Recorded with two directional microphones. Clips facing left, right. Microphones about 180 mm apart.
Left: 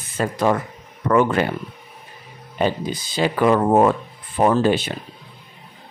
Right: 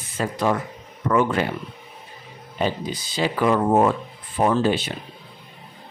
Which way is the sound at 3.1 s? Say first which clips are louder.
Left 3 dB; 55° left (ahead or behind).